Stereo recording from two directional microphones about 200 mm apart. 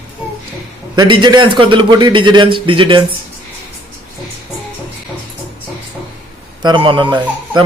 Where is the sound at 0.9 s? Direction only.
20° right (ahead or behind).